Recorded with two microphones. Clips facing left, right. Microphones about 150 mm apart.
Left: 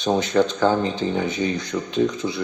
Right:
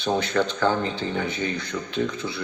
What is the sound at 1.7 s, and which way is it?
Speech, 30° left (ahead or behind).